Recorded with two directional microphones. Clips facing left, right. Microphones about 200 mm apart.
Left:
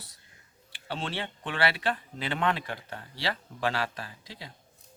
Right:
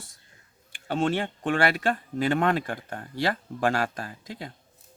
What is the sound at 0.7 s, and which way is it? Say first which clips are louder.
Speech: right 10 dB; 50° right (ahead or behind).